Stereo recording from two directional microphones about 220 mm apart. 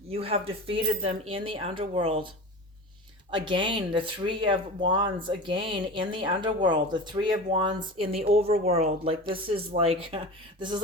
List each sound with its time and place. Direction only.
0.1 s speech: 25° right (ahead or behind)
3.3 s speech: 20° right (ahead or behind)